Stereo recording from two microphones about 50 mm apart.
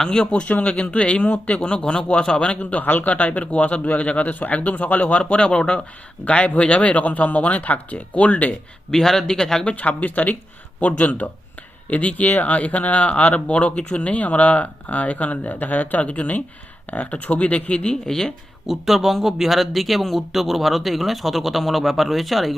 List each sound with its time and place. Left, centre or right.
0.0 s speech: centre; by 8.5 s left
8.9 s speech: centre
9.6 s speech: left; by 18.3 s centre
18.6 s speech: centre